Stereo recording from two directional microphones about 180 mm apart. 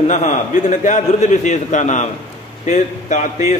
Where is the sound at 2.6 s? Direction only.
40° left (ahead or behind).